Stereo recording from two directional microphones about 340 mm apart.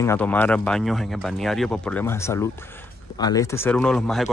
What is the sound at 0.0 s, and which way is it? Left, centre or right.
Speech, centre.